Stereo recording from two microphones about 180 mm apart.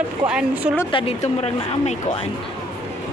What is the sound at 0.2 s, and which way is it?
Speech, 5° right (ahead or behind).